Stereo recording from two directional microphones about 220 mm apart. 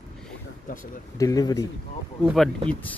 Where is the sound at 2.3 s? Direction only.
5° left (ahead or behind).